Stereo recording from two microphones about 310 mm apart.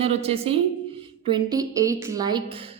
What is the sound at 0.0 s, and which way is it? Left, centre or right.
A woman's voice, centre.